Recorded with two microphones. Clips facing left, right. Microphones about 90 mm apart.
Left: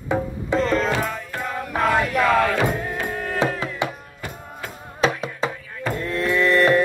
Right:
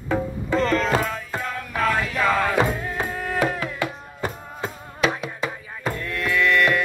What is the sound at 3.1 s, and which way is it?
Music, centre (ahead or behind).